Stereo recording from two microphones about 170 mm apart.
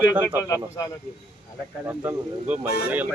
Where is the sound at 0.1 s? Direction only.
5° right (ahead or behind).